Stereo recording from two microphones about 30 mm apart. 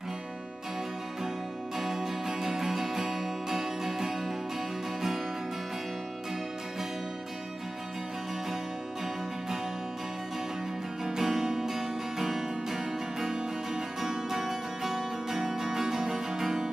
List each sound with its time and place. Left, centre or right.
1.8 s music: centre
11.1 s music: centre